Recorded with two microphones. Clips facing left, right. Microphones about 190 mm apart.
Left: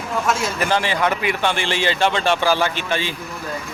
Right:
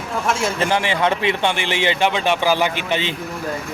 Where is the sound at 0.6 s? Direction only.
20° right (ahead or behind).